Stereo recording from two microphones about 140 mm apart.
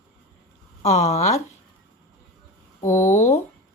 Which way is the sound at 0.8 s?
50° left (ahead or behind).